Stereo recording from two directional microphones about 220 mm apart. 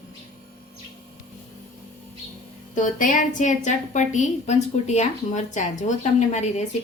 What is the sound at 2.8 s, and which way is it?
A woman's voice, 35° left (ahead or behind).